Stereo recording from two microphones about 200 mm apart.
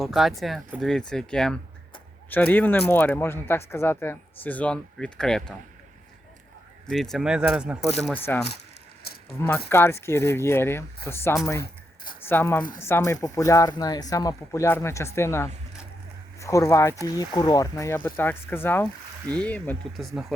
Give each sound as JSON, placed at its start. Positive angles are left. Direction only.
{"t": 0.0, "sound": "speech", "side_deg": 0}
{"t": 6.8, "sound": "speech", "side_deg": 0}
{"t": 9.4, "sound": "speech", "side_deg": 10}